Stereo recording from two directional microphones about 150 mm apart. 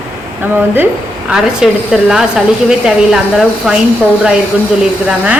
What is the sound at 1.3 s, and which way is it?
A woman's voice, 5° right (ahead or behind).